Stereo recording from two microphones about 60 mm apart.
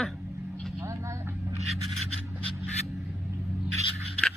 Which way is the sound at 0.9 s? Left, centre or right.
Right.